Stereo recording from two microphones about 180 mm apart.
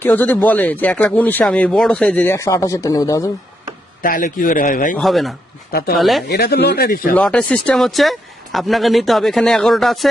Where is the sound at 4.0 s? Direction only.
50° left (ahead or behind).